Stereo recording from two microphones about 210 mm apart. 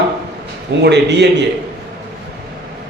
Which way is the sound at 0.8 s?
55° right (ahead or behind).